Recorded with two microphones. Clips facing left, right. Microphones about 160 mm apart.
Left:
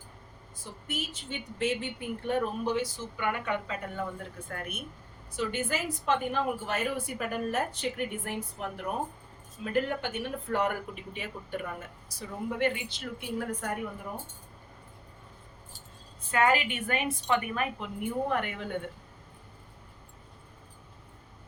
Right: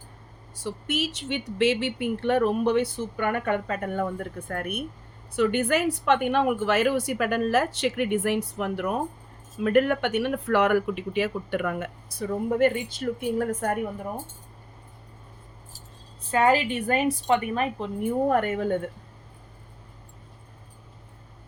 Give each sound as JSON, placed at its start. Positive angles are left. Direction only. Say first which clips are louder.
{"t": 0.5, "sound": "a woman's voice", "louder": "right 9 dB", "side_deg": -80}
{"t": 9.6, "sound": "speech", "louder": "right 9 dB", "side_deg": -70}
{"t": 16.3, "sound": "a woman's voice", "louder": "right 5 dB", "side_deg": -35}